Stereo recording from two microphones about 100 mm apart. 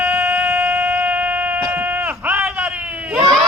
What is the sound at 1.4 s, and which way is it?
Sheep, 15° right (ahead or behind).